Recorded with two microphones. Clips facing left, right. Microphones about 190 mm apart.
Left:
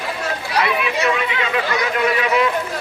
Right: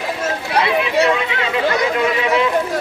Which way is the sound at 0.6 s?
30° right (ahead or behind).